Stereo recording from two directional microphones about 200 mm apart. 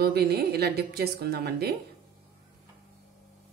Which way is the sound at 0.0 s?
50° right (ahead or behind).